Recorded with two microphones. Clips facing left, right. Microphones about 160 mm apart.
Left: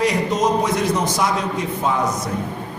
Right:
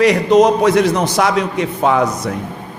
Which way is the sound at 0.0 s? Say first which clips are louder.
Right 8 dB; 75° right (ahead or behind).